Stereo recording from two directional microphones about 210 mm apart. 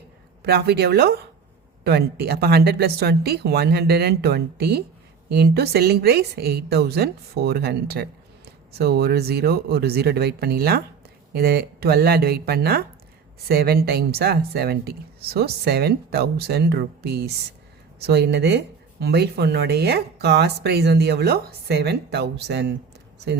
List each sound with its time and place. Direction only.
0.4 s speech: 50° right (ahead or behind)